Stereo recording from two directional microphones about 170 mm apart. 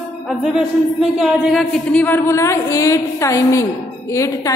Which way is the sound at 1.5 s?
Centre (ahead or behind).